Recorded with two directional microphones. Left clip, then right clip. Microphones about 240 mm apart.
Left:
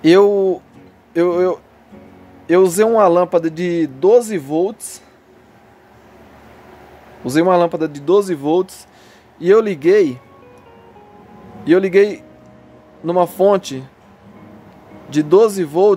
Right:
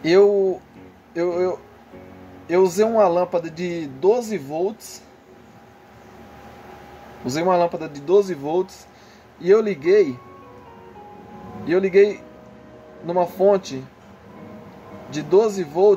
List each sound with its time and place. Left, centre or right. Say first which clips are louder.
0.0 s speech: left 4 dB; left
7.2 s speech: left 5 dB; left
11.6 s speech: left 4 dB; left
15.1 s speech: left 6 dB; left